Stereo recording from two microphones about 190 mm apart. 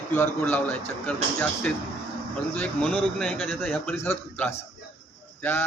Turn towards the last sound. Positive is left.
turn(degrees=10)  # may be behind; listen again after turning